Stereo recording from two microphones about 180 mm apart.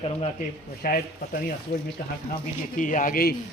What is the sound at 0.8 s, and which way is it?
Speech, 55° left (ahead or behind).